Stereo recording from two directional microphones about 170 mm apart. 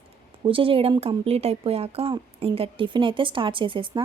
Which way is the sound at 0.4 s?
30° right (ahead or behind).